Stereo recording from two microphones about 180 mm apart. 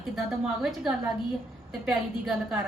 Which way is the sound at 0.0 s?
Centre (ahead or behind).